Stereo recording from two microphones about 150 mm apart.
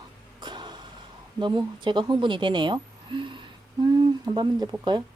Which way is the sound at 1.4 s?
30° right (ahead or behind).